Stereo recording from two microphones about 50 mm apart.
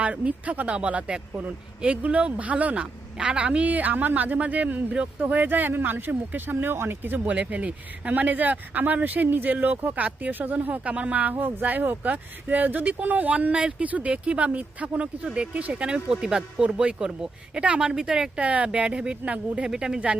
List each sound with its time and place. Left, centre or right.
0.0 s speech: right
7.3 s speech: right
17.8 s speech: centre
18.3 s speech: right
19.6 s speech: centre